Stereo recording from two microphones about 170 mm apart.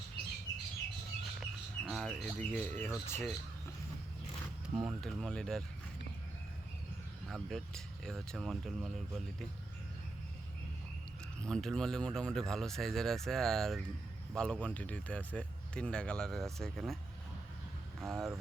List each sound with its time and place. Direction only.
1.4 s speech: centre (ahead or behind)
4.7 s speech: 5° right (ahead or behind)
7.3 s speech: centre (ahead or behind)
11.3 s speech: 5° left (ahead or behind)
18.0 s speech: centre (ahead or behind)